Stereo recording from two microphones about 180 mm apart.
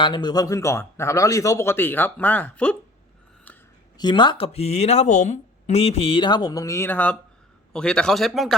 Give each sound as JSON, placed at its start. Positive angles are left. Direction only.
{"t": 0.0, "sound": "speech", "side_deg": 25}
{"t": 3.9, "sound": "a man's voice", "side_deg": 25}